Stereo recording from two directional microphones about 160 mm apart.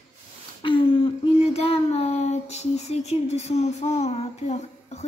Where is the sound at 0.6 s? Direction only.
35° left (ahead or behind).